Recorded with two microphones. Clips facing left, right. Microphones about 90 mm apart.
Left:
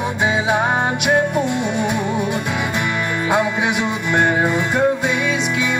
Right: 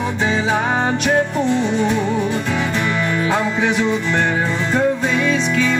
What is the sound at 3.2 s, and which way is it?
Music, 15° left (ahead or behind).